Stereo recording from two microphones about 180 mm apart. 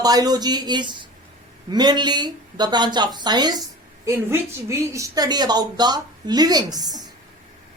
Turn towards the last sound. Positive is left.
turn(degrees=-20)  # may be behind; listen again after turning